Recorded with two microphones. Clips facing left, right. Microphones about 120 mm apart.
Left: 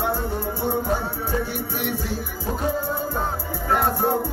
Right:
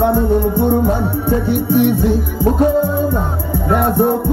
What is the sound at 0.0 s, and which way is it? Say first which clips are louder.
Music: right 11 dB; 55° right (ahead or behind).